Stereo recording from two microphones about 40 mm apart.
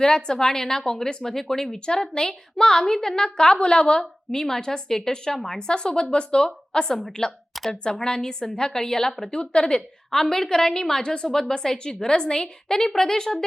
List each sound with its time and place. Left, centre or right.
0.0 s a woman's voice: centre
10.1 s a woman's voice: centre